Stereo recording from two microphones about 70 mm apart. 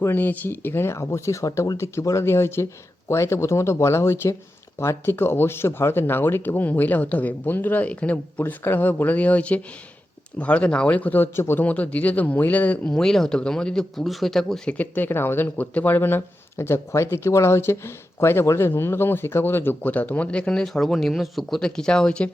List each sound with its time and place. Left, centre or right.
0.0 s speech: left
2.2 s speech: left
11.3 s speech: left
11.6 s speech: left
12.9 s speech: centre
14.7 s speech: left